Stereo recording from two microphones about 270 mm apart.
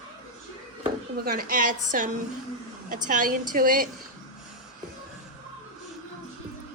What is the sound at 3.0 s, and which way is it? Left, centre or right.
Speech, right.